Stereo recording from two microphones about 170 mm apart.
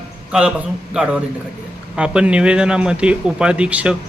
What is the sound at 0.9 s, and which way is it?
Speech, 5° right (ahead or behind).